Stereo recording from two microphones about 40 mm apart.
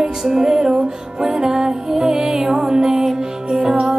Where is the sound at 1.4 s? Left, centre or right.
Centre.